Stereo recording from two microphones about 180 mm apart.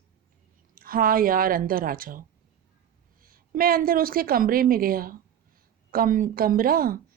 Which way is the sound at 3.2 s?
55° right (ahead or behind).